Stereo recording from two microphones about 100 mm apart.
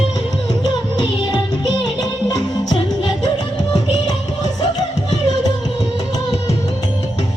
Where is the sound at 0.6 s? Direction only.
45° left (ahead or behind).